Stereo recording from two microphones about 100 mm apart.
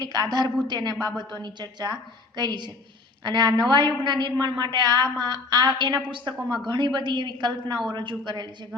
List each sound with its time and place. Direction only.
0.0 s a woman's voice: 40° right (ahead or behind)